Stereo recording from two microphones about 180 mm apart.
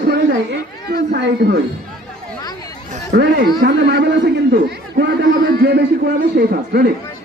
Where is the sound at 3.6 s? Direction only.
65° right (ahead or behind).